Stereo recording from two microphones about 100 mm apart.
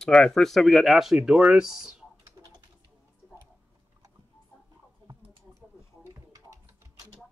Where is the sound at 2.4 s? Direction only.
40° right (ahead or behind).